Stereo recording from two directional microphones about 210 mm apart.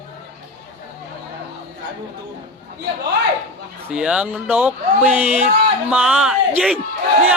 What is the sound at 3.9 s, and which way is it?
Speech, 5° right (ahead or behind).